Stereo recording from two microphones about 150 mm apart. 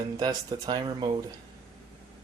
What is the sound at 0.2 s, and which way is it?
Speech, 25° right (ahead or behind).